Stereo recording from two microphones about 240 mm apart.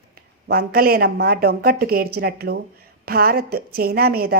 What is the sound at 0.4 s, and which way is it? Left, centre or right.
A woman's voice, right.